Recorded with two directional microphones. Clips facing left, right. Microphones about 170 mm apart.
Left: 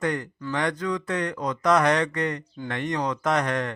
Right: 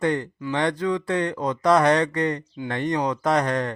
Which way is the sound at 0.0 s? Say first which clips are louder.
Right 4 dB; 30° right (ahead or behind).